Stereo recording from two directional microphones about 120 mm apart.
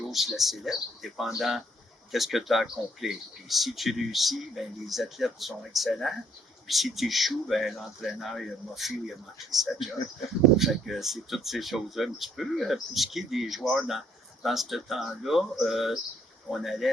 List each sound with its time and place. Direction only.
0.1 s speech: centre (ahead or behind)